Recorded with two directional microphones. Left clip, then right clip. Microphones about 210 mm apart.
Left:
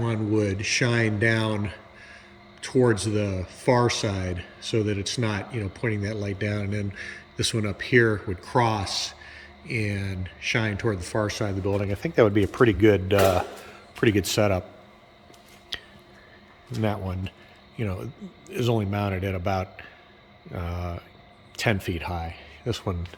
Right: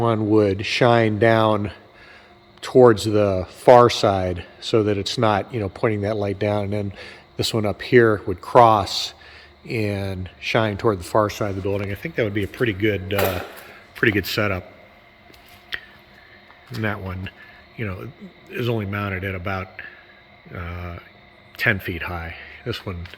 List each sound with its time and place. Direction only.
0.0 s speech: 15° right (ahead or behind)
11.6 s speech: 5° left (ahead or behind)
12.0 s speech: 70° left (ahead or behind)
12.3 s a man's voice: 15° left (ahead or behind)
13.9 s a man's voice: 10° left (ahead or behind)
16.7 s a man's voice: 10° left (ahead or behind)